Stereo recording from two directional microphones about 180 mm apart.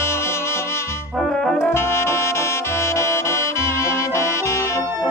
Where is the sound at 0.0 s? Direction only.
15° left (ahead or behind).